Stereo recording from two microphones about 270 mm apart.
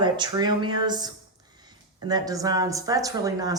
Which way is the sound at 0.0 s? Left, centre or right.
Centre.